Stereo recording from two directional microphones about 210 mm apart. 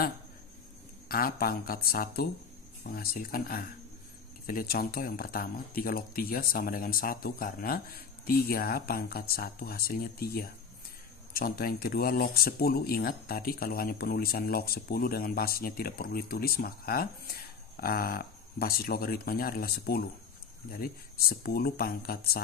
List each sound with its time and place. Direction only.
1.0 s speech: 45° left (ahead or behind)